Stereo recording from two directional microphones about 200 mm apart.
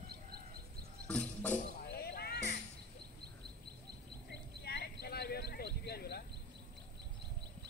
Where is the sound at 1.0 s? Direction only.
5° left (ahead or behind).